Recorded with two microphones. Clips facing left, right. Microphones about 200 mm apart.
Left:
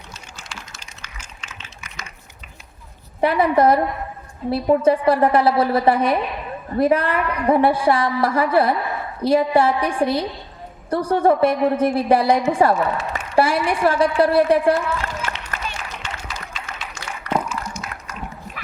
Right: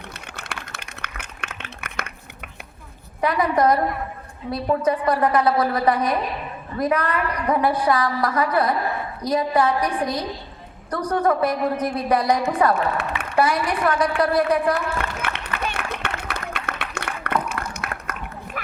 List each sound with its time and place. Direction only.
0.1 s a sound: 60° right (ahead or behind)
3.2 s a woman's voice: 30° left (ahead or behind)
4.8 s a woman's voice: 30° left (ahead or behind)
12.7 s a woman's voice: 60° right (ahead or behind)
13.3 s a woman's voice: 30° left (ahead or behind)
14.8 s a sound: 60° right (ahead or behind)